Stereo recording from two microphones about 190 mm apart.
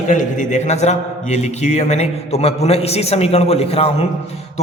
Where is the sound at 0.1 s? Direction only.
40° left (ahead or behind).